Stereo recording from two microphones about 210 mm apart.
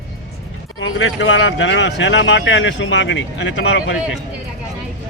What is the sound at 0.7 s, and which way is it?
A man's voice, 65° left (ahead or behind).